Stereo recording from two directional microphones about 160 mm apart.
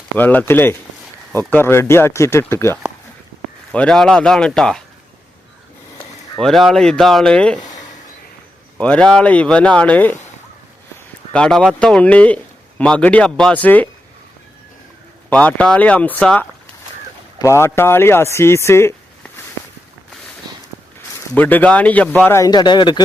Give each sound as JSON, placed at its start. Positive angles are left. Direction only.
{"t": 0.2, "sound": "speech", "side_deg": 10}
{"t": 3.7, "sound": "speech", "side_deg": 5}
{"t": 6.3, "sound": "speech", "side_deg": 0}
{"t": 8.8, "sound": "speech", "side_deg": 5}
{"t": 11.3, "sound": "speech", "side_deg": 5}
{"t": 15.3, "sound": "speech", "side_deg": 10}
{"t": 20.4, "sound": "walk", "side_deg": -25}
{"t": 21.3, "sound": "speech", "side_deg": 10}